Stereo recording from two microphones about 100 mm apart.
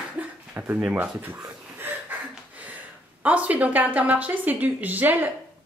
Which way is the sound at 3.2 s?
15° right (ahead or behind).